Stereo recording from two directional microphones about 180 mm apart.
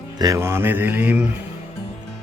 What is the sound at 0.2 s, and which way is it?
Speech, 15° right (ahead or behind).